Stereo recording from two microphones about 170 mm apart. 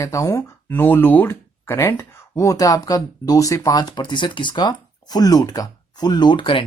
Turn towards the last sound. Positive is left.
turn(degrees=30)  # may be behind; listen again after turning